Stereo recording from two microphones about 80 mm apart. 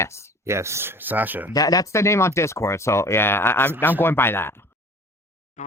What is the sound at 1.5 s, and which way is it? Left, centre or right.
Speech, left.